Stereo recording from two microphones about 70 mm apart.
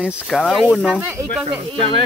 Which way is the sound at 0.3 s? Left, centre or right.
Centre.